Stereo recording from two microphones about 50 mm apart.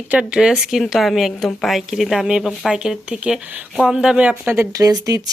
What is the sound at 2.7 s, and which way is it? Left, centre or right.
Speech, centre.